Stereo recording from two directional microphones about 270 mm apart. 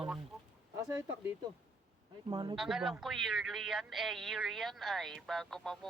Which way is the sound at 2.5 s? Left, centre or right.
Centre.